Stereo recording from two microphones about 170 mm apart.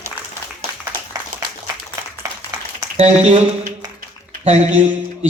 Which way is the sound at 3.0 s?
40° right (ahead or behind).